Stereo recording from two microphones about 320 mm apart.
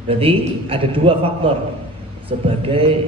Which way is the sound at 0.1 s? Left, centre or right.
Centre.